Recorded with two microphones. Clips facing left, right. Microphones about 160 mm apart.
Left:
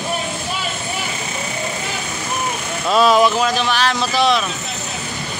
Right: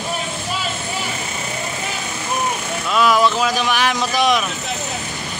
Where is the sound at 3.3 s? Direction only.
10° right (ahead or behind).